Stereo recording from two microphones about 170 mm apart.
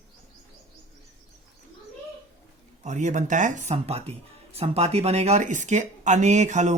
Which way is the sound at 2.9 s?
45° right (ahead or behind).